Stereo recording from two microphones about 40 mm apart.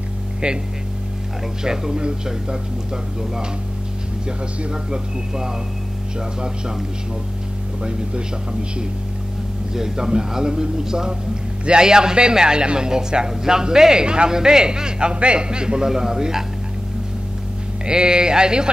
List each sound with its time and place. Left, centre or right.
1.6 s a man's voice: centre
4.6 s a man's voice: centre
9.8 s a man's voice: centre
17.8 s a man's voice: right